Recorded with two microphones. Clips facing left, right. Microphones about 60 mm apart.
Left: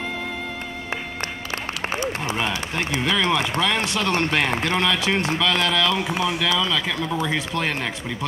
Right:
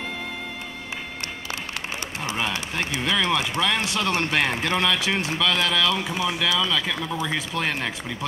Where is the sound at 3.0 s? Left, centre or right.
Centre.